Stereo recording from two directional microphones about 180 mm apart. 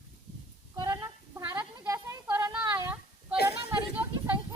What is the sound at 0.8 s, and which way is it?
Female singing, 20° right (ahead or behind).